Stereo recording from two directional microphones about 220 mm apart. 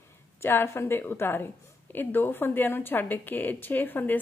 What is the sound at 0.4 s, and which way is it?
A woman's voice, 10° left (ahead or behind).